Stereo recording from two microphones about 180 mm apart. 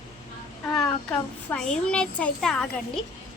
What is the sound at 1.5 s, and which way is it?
A woman's voice, 5° left (ahead or behind).